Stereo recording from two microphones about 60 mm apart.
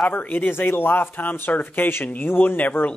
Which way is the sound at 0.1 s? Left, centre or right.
Left.